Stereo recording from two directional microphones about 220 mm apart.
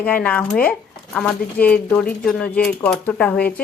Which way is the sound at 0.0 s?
5° left (ahead or behind).